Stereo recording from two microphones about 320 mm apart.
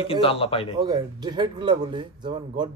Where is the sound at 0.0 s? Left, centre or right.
Centre.